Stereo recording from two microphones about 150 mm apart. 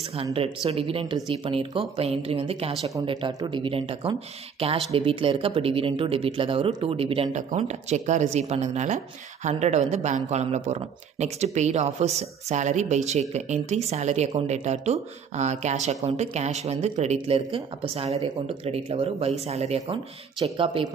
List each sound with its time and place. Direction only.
0.1 s speech: 40° right (ahead or behind)
3.1 s speech: 30° right (ahead or behind)